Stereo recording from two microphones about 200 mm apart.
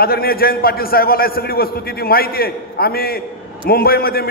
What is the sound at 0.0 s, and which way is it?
A man's voice, 50° left (ahead or behind).